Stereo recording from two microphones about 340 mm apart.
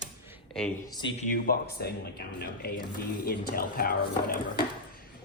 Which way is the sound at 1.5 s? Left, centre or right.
Left.